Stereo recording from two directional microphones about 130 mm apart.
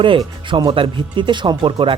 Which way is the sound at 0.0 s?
40° right (ahead or behind).